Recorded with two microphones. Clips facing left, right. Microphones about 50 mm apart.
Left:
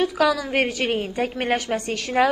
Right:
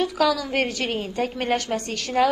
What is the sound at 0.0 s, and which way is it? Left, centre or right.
A woman's voice, left.